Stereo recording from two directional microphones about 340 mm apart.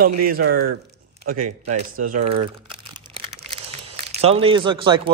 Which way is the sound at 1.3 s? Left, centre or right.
Right.